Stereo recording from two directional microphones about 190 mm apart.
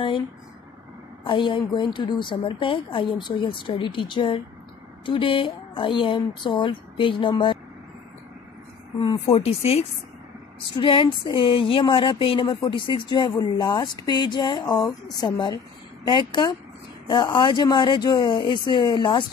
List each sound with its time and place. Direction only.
1.2 s a woman's voice: 25° left (ahead or behind)
9.0 s a woman's voice: 30° left (ahead or behind)